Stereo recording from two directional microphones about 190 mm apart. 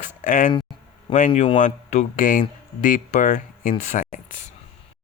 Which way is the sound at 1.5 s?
40° left (ahead or behind).